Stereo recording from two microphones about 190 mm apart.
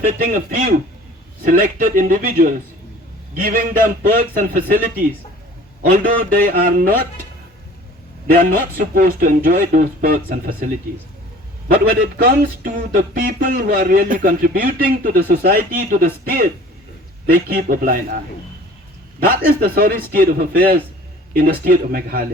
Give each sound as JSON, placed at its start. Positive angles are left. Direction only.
{"t": 0.2, "sound": "speech", "side_deg": -50}
{"t": 8.3, "sound": "speech", "side_deg": -50}
{"t": 11.7, "sound": "speech", "side_deg": -50}
{"t": 19.2, "sound": "speech", "side_deg": -50}